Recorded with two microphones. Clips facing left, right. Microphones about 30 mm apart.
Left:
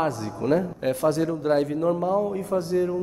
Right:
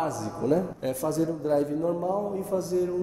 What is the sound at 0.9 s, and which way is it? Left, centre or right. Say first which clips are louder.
A man's voice: left 5 dB; left.